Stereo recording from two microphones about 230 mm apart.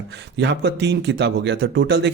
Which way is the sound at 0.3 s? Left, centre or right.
Right.